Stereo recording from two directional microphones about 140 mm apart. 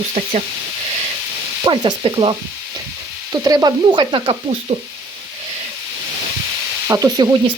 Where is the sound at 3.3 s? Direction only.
25° right (ahead or behind).